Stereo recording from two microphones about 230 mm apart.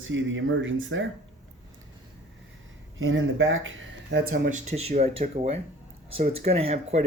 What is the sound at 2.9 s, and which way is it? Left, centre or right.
Speech, right.